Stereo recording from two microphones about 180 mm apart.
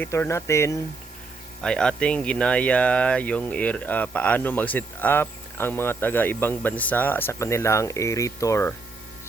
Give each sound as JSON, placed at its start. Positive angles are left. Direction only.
{"t": 0.0, "sound": "speech", "side_deg": 15}
{"t": 1.6, "sound": "speech", "side_deg": 5}